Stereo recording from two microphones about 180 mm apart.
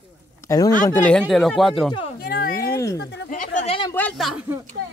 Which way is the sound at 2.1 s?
55° left (ahead or behind).